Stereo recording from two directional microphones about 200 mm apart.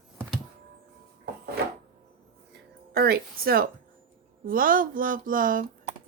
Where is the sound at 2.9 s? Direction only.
50° right (ahead or behind).